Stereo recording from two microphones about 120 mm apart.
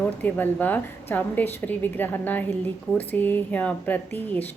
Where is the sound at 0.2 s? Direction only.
15° left (ahead or behind).